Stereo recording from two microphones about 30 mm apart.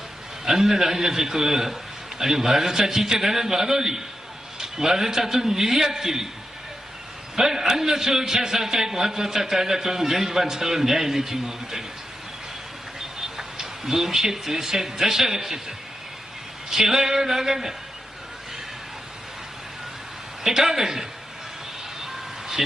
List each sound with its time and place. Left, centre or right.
0.4 s a man's voice: centre
7.3 s a man's voice: centre
13.3 s speech: centre
16.6 s a man's voice: centre
20.4 s a man's voice: centre
22.0 s vehicle: centre